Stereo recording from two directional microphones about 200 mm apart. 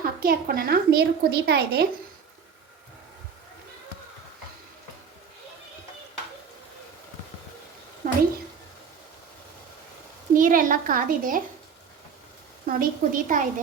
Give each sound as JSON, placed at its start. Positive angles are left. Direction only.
{"t": 0.2, "sound": "a woman's voice", "side_deg": -45}
{"t": 8.0, "sound": "a sound", "side_deg": -45}
{"t": 10.3, "sound": "a woman's voice", "side_deg": -40}
{"t": 12.6, "sound": "a woman's voice", "side_deg": -45}